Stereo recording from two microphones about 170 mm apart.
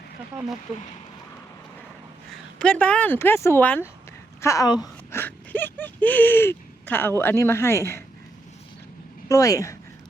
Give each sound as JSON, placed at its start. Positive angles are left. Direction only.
{"t": 2.3, "sound": "speech", "side_deg": 5}
{"t": 9.3, "sound": "speech", "side_deg": 20}